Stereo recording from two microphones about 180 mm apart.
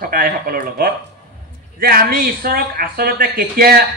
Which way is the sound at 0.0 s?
50° right (ahead or behind).